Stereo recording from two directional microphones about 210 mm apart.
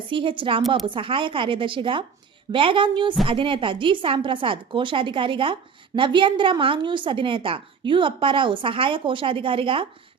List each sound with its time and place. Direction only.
0.1 s a woman's voice: 25° right (ahead or behind)